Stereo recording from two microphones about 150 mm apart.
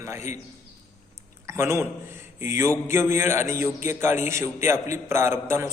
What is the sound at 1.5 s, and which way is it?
A man's voice, 20° right (ahead or behind).